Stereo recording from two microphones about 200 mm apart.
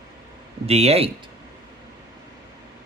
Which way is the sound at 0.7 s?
30° right (ahead or behind).